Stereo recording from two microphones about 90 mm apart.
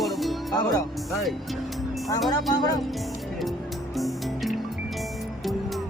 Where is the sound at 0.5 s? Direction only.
45° left (ahead or behind).